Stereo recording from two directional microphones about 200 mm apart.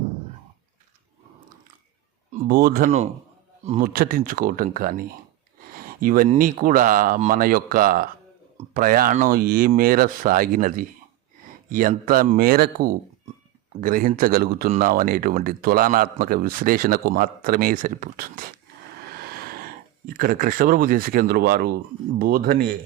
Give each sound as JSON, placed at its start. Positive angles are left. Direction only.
{"t": 2.3, "sound": "speech", "side_deg": -40}
{"t": 5.7, "sound": "a sound", "side_deg": -45}
{"t": 6.3, "sound": "speech", "side_deg": -40}